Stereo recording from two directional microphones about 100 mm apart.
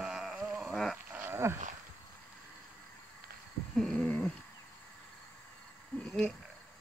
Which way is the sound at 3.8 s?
10° left (ahead or behind).